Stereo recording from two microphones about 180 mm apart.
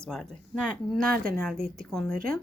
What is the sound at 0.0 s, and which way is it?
Speech, centre (ahead or behind).